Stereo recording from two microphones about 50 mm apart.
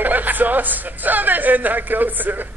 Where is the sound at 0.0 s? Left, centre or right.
Right.